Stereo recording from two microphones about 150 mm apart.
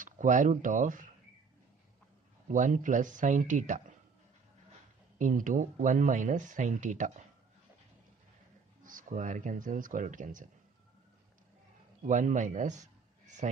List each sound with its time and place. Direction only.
0.0 s speech: 60° right (ahead or behind)
2.4 s speech: 60° right (ahead or behind)
5.2 s speech: 60° right (ahead or behind)
8.8 s speech: 60° right (ahead or behind)
12.0 s a man's voice: 55° right (ahead or behind)